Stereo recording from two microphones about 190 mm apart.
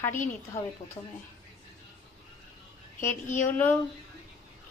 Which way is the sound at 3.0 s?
40° left (ahead or behind).